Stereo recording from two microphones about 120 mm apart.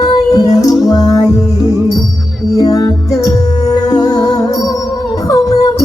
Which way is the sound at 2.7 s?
30° left (ahead or behind).